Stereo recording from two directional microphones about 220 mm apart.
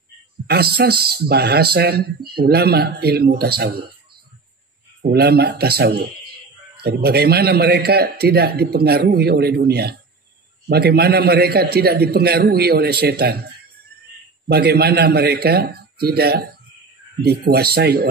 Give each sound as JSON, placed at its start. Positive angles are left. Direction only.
{"t": 0.5, "sound": "a man's voice", "side_deg": -45}
{"t": 5.0, "sound": "a man's voice", "side_deg": -45}
{"t": 14.5, "sound": "a man's voice", "side_deg": -45}